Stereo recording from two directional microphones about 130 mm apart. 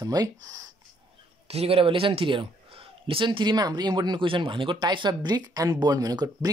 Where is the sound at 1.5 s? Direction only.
45° right (ahead or behind).